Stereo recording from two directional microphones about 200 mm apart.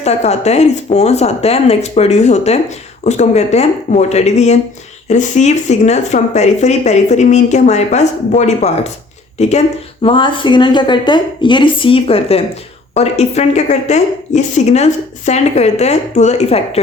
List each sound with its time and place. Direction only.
0.0 s a woman's voice: 35° left (ahead or behind)